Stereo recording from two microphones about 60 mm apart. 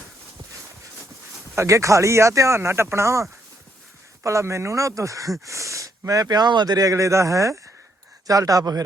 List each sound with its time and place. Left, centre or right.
1.5 s speech: right
2.6 s speech: right
8.3 s speech: right